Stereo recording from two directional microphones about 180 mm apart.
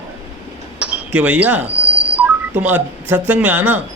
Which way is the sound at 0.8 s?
5° right (ahead or behind).